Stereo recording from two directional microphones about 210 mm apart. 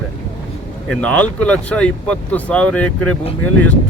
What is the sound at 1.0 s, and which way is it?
Speech, 5° left (ahead or behind).